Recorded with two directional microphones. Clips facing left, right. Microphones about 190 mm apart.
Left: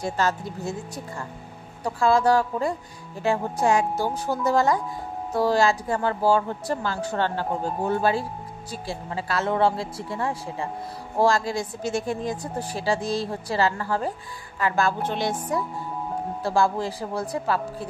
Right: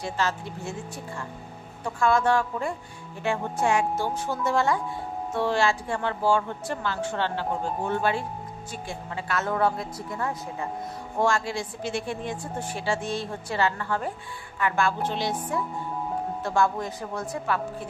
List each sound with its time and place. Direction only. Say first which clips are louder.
0.0 s a woman's voice: left 3 dB; 45° left (ahead or behind)
15.0 s music: left 2 dB; 50° left (ahead or behind)
16.4 s a woman's voice: left 3 dB; 30° left (ahead or behind)